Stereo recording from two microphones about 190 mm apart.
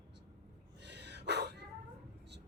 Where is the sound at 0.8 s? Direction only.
65° right (ahead or behind).